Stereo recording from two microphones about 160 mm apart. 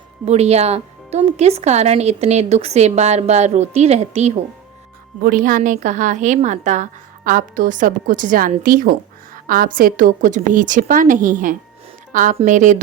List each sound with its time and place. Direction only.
0.3 s speech: 40° right (ahead or behind)
5.2 s speech: 60° right (ahead or behind)
7.3 s a woman's voice: 60° right (ahead or behind)